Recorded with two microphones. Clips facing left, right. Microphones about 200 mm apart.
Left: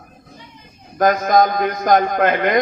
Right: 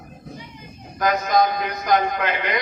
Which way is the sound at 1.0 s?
50° left (ahead or behind).